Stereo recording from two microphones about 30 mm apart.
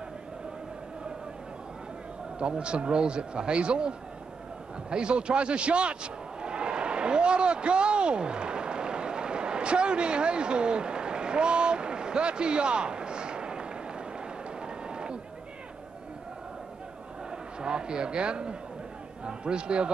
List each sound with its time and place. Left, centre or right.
2.3 s speech: right
4.8 s a sound: right
17.6 s a man's voice: right